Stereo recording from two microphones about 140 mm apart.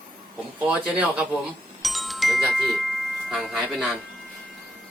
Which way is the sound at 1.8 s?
Centre (ahead or behind).